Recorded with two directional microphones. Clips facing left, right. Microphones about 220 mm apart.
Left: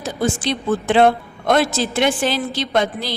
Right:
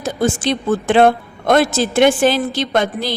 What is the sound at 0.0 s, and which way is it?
A woman's voice, 50° right (ahead or behind).